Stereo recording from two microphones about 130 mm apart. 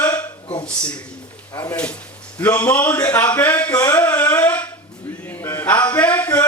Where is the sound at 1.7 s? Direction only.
10° left (ahead or behind).